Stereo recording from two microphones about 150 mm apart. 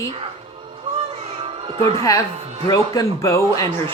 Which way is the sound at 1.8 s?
20° left (ahead or behind).